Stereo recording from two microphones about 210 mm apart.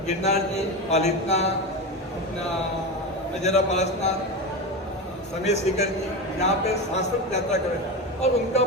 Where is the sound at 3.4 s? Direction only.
35° left (ahead or behind).